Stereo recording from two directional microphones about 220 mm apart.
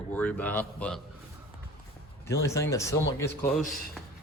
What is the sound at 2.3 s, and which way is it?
Speech, 15° left (ahead or behind).